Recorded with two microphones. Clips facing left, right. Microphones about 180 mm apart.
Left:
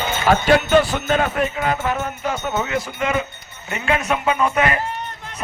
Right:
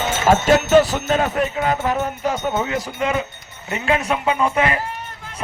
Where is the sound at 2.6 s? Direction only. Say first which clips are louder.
Even; 35° right (ahead or behind).